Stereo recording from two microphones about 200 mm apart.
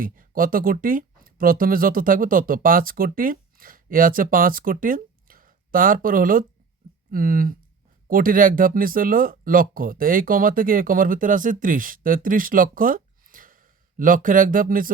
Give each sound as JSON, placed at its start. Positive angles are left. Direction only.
{"t": 0.0, "sound": "speech", "side_deg": -45}